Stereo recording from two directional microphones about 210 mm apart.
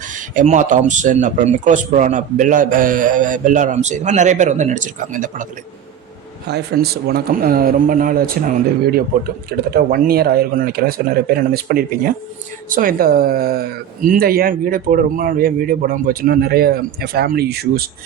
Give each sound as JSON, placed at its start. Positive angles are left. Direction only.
{"t": 0.1, "sound": "speech", "side_deg": -40}
{"t": 6.5, "sound": "speech", "side_deg": -50}
{"t": 9.5, "sound": "speech", "side_deg": -45}